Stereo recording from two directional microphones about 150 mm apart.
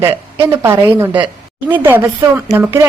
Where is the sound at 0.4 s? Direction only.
15° right (ahead or behind).